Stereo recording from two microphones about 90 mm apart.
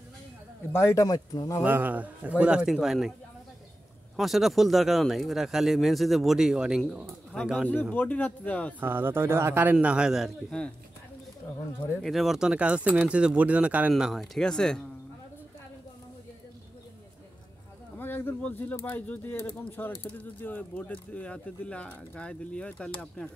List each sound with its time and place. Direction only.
0.7 s speech: 35° left (ahead or behind)
1.6 s speech: 20° right (ahead or behind); by 3.1 s centre (ahead or behind)
4.2 s speech: centre (ahead or behind)
7.9 s speech: 15° left (ahead or behind)
8.7 s a man's voice: 20° right (ahead or behind); by 10.3 s 5° right (ahead or behind)
11.4 s speech: 20° left (ahead or behind)
12.0 s speech: centre (ahead or behind)
13.9 s speech: centre (ahead or behind)
17.9 s a sound: 20° left (ahead or behind)
18.8 s speech: 20° left (ahead or behind)